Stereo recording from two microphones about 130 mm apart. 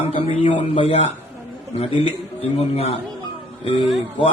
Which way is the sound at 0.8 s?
50° left (ahead or behind).